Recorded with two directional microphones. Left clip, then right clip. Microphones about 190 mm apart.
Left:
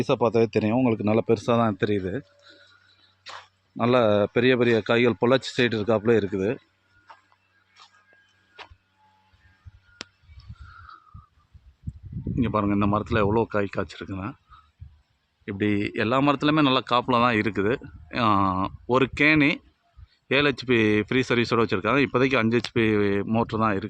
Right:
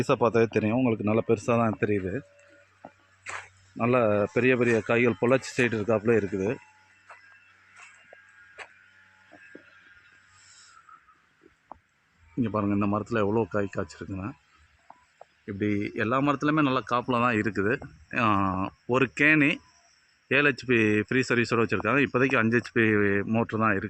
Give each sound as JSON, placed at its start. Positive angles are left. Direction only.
{"t": 0.0, "sound": "speech", "side_deg": 5}
{"t": 3.8, "sound": "speech", "side_deg": 10}
{"t": 12.4, "sound": "speech", "side_deg": 10}
{"t": 15.4, "sound": "speech", "side_deg": 20}